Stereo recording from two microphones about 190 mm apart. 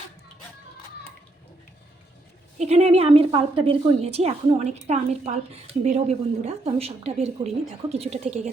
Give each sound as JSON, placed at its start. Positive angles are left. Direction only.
{"t": 2.6, "sound": "a woman's voice", "side_deg": -35}